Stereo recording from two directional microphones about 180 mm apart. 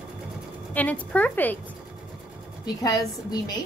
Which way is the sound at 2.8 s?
20° left (ahead or behind).